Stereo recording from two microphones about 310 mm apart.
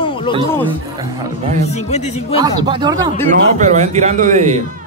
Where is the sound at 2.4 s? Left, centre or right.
Centre.